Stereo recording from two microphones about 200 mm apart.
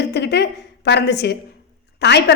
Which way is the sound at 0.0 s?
55° left (ahead or behind).